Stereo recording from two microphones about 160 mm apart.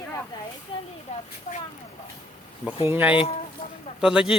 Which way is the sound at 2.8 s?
10° right (ahead or behind).